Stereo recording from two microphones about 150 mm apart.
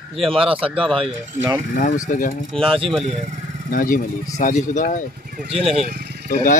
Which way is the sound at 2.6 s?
35° right (ahead or behind).